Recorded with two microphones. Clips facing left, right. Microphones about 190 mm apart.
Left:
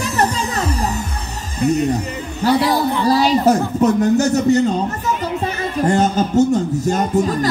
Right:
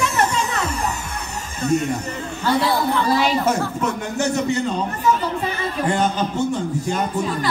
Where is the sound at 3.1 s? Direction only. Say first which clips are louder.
Left 8 dB; 35° left (ahead or behind).